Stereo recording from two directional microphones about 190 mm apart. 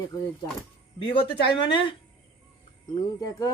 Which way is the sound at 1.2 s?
25° left (ahead or behind).